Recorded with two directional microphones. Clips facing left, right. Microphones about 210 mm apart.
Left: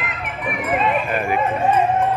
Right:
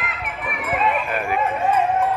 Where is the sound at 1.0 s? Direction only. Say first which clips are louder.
Left 2 dB; centre (ahead or behind).